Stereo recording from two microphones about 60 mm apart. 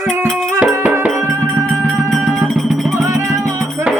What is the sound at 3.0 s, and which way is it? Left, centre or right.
Music, right.